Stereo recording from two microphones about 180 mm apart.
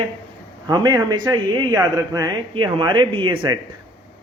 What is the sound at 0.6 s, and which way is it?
A man's voice, 25° right (ahead or behind).